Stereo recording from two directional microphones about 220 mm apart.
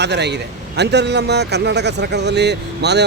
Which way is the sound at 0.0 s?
50° right (ahead or behind).